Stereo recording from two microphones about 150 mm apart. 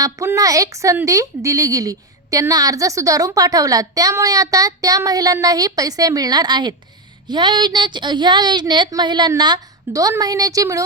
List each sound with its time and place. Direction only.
0.0 s a woman's voice: 20° right (ahead or behind)